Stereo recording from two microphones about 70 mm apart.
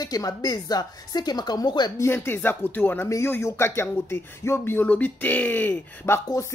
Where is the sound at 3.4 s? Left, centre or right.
Left.